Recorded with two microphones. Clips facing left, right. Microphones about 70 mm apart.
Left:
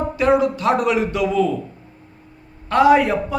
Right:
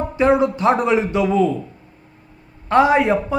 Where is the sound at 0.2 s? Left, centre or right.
Right.